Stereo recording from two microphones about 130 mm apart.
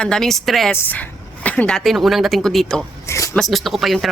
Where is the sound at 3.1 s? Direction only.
25° left (ahead or behind).